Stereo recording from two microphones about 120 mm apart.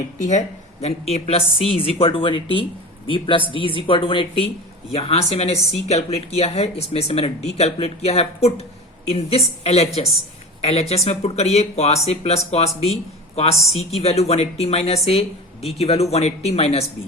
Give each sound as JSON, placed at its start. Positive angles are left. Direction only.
{"t": 0.2, "sound": "speech", "side_deg": 85}
{"t": 4.9, "sound": "speech", "side_deg": 60}
{"t": 9.6, "sound": "a woman's voice", "side_deg": 60}